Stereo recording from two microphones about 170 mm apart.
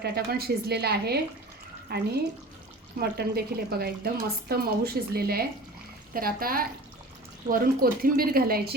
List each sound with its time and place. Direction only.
0.0 s a woman's voice: 65° right (ahead or behind)